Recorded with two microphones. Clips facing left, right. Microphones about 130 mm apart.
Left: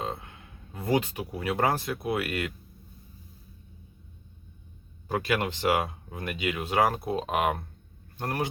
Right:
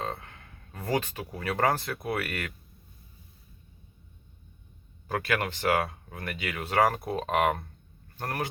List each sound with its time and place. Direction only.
0.0 s speech: 15° left (ahead or behind)
5.0 s speech: 15° left (ahead or behind)